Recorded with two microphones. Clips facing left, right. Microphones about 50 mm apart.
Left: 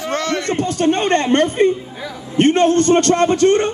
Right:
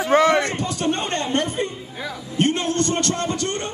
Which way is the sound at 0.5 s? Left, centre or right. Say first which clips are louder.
Left 7 dB; left.